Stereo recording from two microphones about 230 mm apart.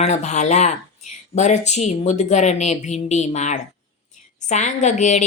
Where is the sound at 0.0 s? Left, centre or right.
Left.